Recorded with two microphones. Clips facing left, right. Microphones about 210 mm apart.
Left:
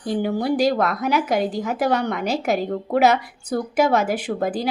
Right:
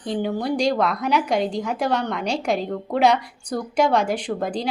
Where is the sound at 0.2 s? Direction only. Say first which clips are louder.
Left 3 dB; 5° left (ahead or behind).